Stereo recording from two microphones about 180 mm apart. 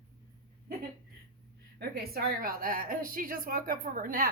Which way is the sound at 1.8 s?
60° right (ahead or behind).